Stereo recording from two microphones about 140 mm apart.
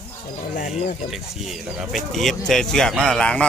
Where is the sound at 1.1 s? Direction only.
Centre (ahead or behind).